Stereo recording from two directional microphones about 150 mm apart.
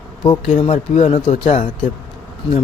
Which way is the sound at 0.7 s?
50° left (ahead or behind).